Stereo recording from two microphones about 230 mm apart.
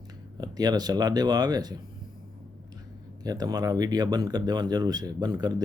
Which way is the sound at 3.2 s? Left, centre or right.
Centre.